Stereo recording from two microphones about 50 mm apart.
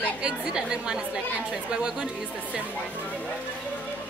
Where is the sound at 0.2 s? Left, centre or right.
Right.